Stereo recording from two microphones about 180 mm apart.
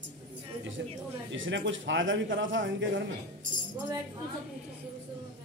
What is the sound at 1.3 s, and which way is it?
A man's voice, 90° right.